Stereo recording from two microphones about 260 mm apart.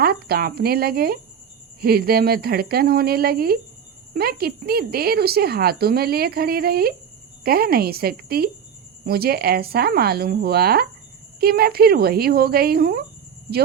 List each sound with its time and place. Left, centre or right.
0.0 s speech: right